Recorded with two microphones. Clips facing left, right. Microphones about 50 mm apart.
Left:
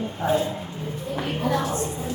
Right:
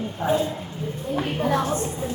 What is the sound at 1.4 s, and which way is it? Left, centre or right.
Speech, right.